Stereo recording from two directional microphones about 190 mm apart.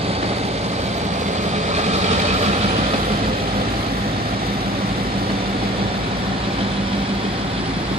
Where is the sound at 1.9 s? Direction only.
35° right (ahead or behind).